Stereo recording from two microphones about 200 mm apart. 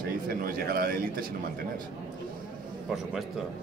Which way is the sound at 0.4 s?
50° right (ahead or behind).